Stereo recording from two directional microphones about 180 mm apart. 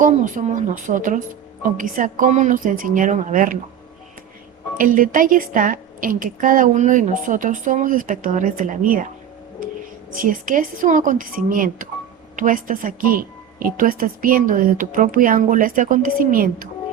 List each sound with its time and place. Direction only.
0.0 s a woman's voice: 45° right (ahead or behind)
4.8 s a woman's voice: 50° right (ahead or behind)
10.2 s a woman's voice: 50° right (ahead or behind)